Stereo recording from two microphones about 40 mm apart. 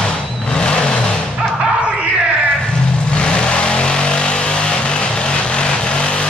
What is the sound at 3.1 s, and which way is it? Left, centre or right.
Vehicle, left.